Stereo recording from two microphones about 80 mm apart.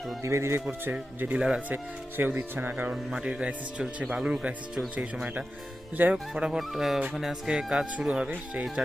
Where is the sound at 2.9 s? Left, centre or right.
Centre.